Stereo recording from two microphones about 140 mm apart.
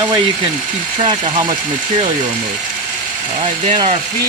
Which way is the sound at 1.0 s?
40° right (ahead or behind).